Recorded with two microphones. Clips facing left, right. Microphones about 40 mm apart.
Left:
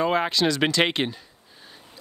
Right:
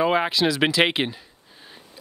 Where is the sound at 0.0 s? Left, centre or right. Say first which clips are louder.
Right 2 dB; centre.